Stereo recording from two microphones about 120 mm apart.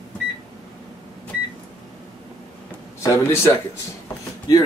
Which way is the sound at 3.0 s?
25° left (ahead or behind).